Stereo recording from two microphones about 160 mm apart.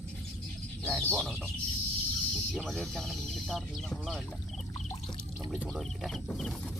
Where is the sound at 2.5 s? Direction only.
5° left (ahead or behind).